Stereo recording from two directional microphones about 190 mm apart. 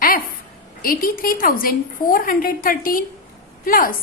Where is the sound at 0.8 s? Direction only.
50° left (ahead or behind).